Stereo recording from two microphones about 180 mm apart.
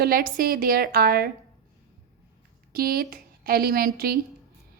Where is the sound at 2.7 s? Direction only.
55° right (ahead or behind).